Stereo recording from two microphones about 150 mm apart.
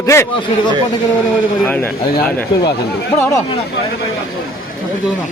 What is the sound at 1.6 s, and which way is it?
Speech, 10° left (ahead or behind).